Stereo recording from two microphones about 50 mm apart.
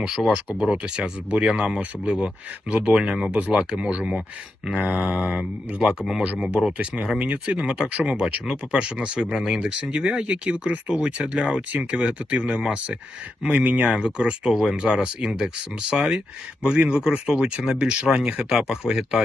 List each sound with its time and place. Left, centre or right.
0.2 s speech: left
0.6 s speech: right
6.7 s speech: right
18.4 s speech: centre